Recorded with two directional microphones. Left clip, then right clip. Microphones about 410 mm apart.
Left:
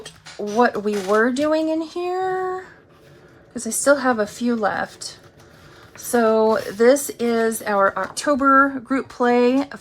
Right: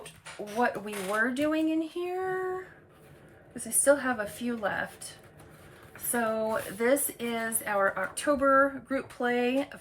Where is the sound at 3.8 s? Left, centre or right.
Centre.